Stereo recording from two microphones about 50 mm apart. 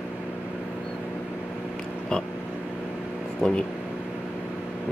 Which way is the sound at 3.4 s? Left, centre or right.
Left.